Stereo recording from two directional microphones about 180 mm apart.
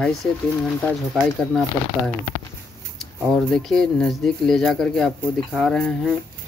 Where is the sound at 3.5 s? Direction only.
5° left (ahead or behind).